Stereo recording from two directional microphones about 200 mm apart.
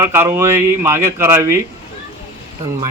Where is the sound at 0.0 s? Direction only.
10° right (ahead or behind).